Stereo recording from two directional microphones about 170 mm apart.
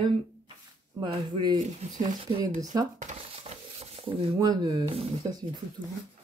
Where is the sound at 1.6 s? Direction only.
45° right (ahead or behind).